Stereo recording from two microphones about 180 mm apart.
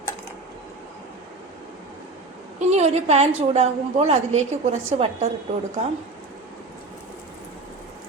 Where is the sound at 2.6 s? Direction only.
40° right (ahead or behind).